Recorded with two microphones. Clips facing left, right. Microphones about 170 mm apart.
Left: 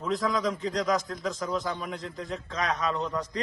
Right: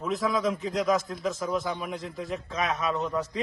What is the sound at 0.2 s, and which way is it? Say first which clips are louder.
A man's voice: right 1 dB; 10° right (ahead or behind).